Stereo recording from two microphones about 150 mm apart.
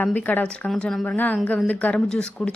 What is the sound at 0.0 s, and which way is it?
A woman's voice, 10° left (ahead or behind).